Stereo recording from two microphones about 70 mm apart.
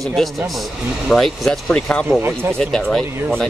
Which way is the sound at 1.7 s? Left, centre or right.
Centre.